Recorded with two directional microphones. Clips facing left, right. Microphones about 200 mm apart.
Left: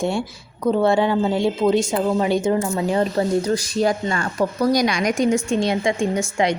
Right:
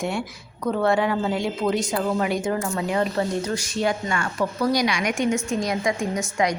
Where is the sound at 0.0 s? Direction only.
30° left (ahead or behind).